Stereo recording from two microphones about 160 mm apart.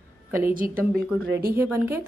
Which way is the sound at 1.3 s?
75° right (ahead or behind).